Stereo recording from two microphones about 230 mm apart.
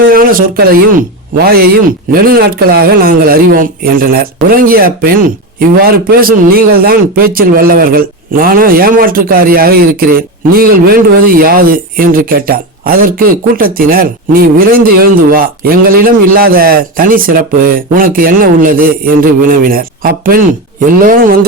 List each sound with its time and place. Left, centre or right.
0.1 s a man's voice: right